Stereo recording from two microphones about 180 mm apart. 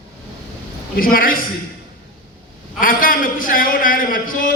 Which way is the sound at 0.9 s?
50° left (ahead or behind).